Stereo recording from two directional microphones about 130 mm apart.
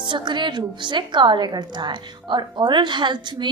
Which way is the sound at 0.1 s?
35° right (ahead or behind).